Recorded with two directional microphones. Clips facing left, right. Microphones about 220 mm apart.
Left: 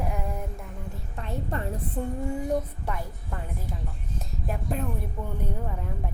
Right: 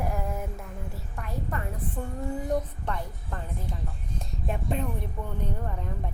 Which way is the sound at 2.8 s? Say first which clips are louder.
Even; 10° left (ahead or behind).